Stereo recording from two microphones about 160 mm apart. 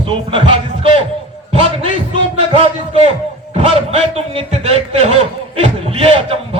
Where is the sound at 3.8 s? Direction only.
40° right (ahead or behind).